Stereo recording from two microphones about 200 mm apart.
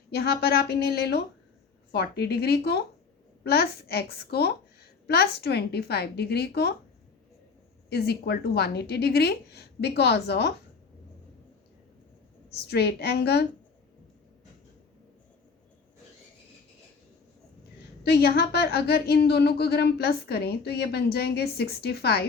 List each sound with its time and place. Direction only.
0.1 s a woman's voice: 55° left (ahead or behind)
7.9 s a woman's voice: 55° left (ahead or behind)
12.6 s a woman's voice: 55° left (ahead or behind)
18.0 s a woman's voice: 55° left (ahead or behind)